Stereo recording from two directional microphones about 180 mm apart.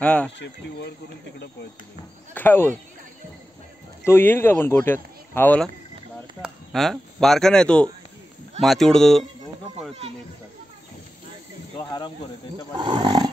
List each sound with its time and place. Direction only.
0.0 s speech: 5° left (ahead or behind)
0.4 s speech: 70° left (ahead or behind)
2.3 s speech: 10° left (ahead or behind)
4.0 s speech: 10° left (ahead or behind)
11.8 s speech: 20° left (ahead or behind)
12.7 s speech: 25° right (ahead or behind)